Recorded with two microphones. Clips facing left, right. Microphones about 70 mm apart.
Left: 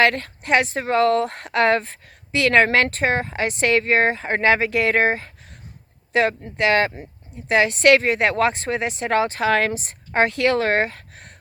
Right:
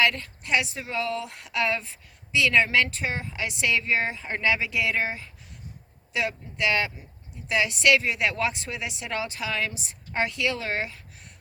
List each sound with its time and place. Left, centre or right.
0.0 s speech: left